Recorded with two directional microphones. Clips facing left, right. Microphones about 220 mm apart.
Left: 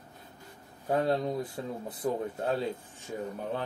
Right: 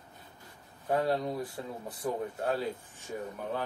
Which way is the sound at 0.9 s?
25° left (ahead or behind).